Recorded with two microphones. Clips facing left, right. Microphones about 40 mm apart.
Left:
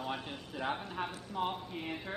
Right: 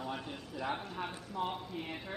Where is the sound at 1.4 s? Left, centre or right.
Left.